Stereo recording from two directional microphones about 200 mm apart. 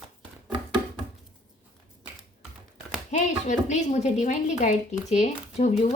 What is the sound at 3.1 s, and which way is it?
Speech, 35° left (ahead or behind).